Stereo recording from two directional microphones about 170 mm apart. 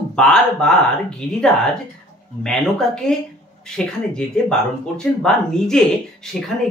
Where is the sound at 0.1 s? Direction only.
5° left (ahead or behind).